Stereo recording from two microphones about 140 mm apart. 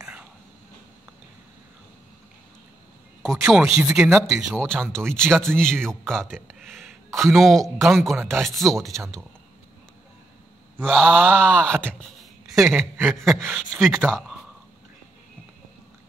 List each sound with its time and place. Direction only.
3.2 s speech: centre (ahead or behind)
6.7 s a sound: centre (ahead or behind)
7.2 s speech: centre (ahead or behind)
10.8 s speech: 5° left (ahead or behind)
11.1 s groan: 15° right (ahead or behind)
11.3 s speech: 10° left (ahead or behind)
11.8 s a sound: 5° left (ahead or behind)
13.1 s speech: centre (ahead or behind)